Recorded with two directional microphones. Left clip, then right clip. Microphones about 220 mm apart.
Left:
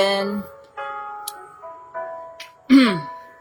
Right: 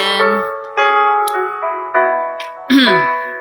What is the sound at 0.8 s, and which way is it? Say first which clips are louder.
Music: right 19 dB; 45° right (ahead or behind).